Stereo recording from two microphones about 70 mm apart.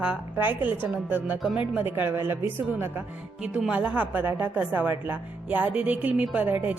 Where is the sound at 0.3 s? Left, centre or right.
Right.